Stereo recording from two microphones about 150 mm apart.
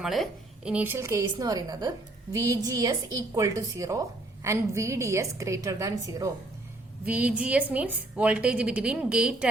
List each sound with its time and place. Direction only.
0.0 s a woman's voice: centre (ahead or behind); by 6.3 s 20° right (ahead or behind)
7.0 s a woman's voice: 10° right (ahead or behind)